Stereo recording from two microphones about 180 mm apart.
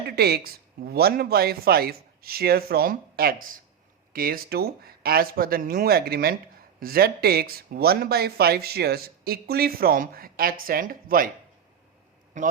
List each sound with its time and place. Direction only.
0.2 s speech: 60° right (ahead or behind)
12.4 s a man's voice: 45° right (ahead or behind)